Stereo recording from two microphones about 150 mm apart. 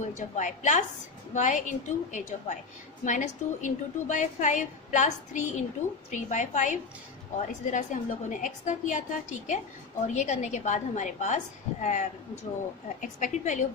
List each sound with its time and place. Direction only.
0.0 s a woman's voice: 55° left (ahead or behind)